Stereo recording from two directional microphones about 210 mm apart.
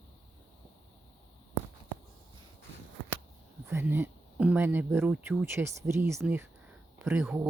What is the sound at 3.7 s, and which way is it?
Speech, 10° right (ahead or behind).